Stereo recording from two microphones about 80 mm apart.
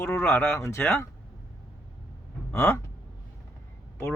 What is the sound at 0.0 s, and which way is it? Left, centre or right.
Speech, left.